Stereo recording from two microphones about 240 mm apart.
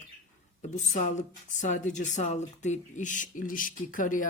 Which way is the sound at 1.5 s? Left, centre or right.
Left.